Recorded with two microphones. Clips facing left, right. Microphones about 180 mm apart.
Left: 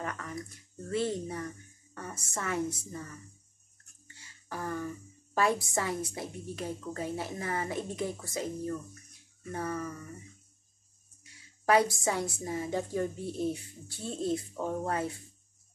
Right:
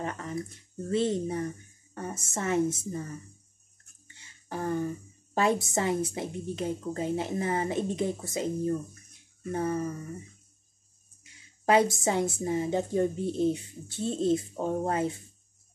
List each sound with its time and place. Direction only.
0.0 s a woman's voice: 25° right (ahead or behind)
4.2 s a woman's voice: 25° right (ahead or behind)
11.6 s a woman's voice: 25° right (ahead or behind)